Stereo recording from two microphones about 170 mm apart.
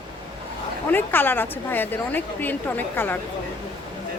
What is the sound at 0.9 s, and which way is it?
Speech, 10° left (ahead or behind).